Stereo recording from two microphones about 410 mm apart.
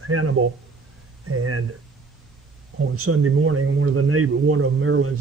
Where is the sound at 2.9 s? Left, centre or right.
Right.